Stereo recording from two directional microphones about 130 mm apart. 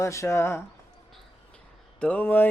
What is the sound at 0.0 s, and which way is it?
Speech, 25° left (ahead or behind).